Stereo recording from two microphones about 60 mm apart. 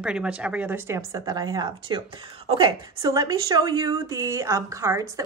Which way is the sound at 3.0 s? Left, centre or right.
Right.